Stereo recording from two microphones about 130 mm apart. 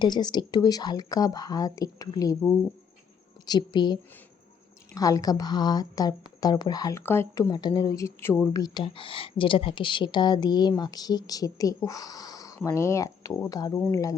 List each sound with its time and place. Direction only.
0.0 s speech: 35° left (ahead or behind)
4.9 s speech: 25° left (ahead or behind)
7.0 s speech: 20° left (ahead or behind)
7.5 s speech: 35° left (ahead or behind)
7.9 s speech: 20° left (ahead or behind)